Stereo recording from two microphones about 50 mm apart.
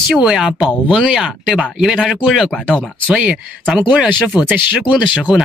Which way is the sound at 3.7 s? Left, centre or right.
Centre.